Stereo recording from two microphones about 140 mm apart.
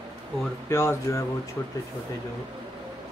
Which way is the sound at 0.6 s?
20° left (ahead or behind).